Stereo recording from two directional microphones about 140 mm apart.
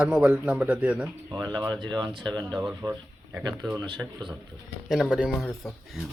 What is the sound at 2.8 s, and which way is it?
Speech, 20° right (ahead or behind).